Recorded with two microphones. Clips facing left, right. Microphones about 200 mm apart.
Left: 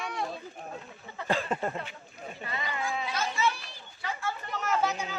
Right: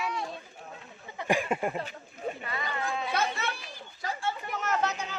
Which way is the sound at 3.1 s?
60° right (ahead or behind).